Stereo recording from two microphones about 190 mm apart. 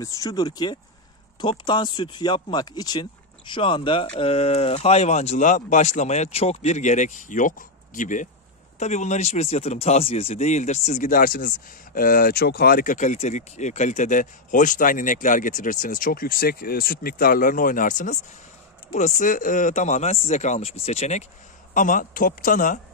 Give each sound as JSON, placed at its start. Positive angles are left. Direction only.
{"t": 0.0, "sound": "speech", "side_deg": 15}